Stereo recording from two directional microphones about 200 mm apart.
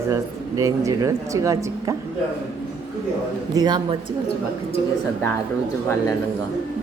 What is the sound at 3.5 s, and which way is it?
Speech, 20° right (ahead or behind).